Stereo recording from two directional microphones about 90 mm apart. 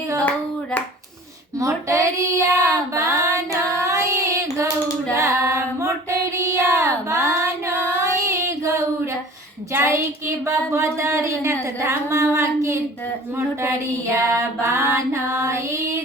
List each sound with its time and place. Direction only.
1.5 s child singing: 35° right (ahead or behind)
5.1 s singing: 35° right (ahead or behind)
6.4 s child singing: 30° right (ahead or behind)
9.7 s speech: 30° right (ahead or behind)
10.7 s female singing: 30° right (ahead or behind)
14.2 s female singing: 35° right (ahead or behind)